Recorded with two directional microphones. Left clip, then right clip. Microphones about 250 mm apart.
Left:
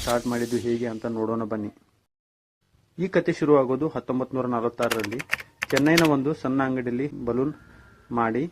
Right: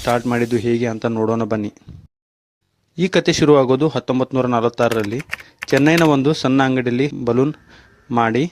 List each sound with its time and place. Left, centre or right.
0.1 s speech: right
3.2 s speech: right
4.9 s speech: centre
6.1 s speech: right